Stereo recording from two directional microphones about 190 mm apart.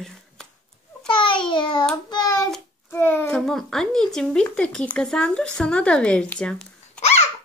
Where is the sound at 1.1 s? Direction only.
25° left (ahead or behind).